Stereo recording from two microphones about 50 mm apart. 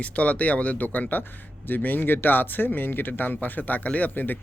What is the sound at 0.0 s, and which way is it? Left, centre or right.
Speech, left.